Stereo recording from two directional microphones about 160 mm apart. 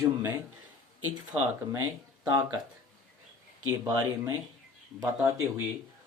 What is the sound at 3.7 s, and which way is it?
Speech, 20° right (ahead or behind).